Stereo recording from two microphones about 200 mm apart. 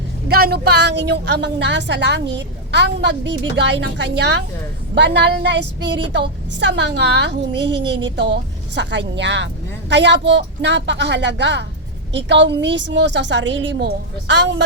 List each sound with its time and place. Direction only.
0.3 s a woman's voice: 50° right (ahead or behind)